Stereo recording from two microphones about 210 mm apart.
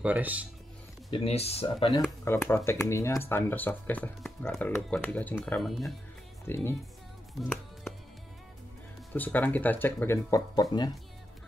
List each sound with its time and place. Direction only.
0.0 s speech: 5° right (ahead or behind)
1.1 s speech: 30° left (ahead or behind)
2.2 s speech: 10° left (ahead or behind)
6.4 s speech: 10° left (ahead or behind)
9.1 s speech: 10° left (ahead or behind)